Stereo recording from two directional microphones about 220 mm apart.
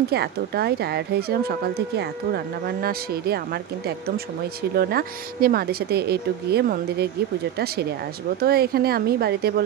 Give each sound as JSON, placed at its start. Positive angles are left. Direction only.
{"t": 0.1, "sound": "speech", "side_deg": -45}